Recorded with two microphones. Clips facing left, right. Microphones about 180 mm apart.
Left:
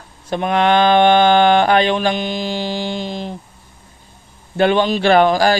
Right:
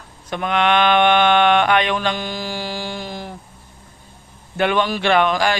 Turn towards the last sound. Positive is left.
turn(degrees=35)  # may be behind; listen again after turning